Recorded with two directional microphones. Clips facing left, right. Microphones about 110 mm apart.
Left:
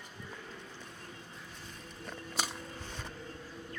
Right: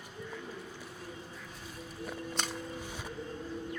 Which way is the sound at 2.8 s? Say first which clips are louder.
Right 3 dB; 10° right (ahead or behind).